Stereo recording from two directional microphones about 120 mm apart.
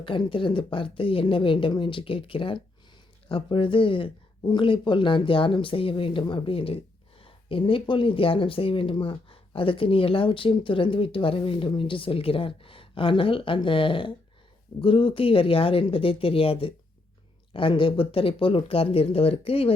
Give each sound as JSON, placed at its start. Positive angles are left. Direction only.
{"t": 0.0, "sound": "speech", "side_deg": 45}